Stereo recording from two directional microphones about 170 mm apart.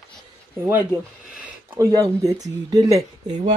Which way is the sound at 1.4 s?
15° right (ahead or behind).